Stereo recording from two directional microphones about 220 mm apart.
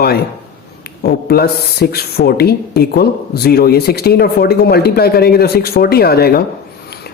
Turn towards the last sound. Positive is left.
turn(degrees=45)  # may be behind; listen again after turning